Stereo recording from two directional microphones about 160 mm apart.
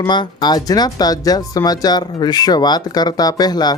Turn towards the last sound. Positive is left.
turn(degrees=25)  # may be behind; listen again after turning